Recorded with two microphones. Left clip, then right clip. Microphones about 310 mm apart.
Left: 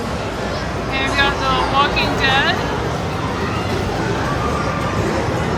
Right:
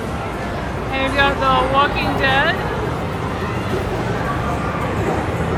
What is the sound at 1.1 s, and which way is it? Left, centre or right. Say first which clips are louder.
Speech: right 2 dB; centre.